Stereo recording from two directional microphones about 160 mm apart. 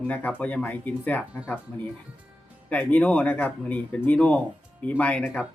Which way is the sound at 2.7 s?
10° left (ahead or behind).